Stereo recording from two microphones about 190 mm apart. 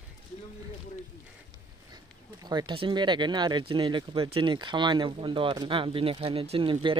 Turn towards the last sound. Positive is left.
turn(degrees=-25)  # may be behind; listen again after turning